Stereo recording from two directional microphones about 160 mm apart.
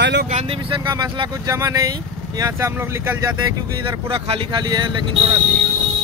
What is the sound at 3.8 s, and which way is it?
Speech, 30° right (ahead or behind).